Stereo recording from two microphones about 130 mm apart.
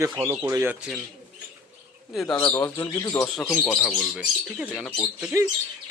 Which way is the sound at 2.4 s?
20° left (ahead or behind).